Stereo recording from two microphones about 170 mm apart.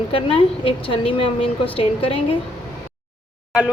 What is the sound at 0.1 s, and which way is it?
Speech, 30° left (ahead or behind).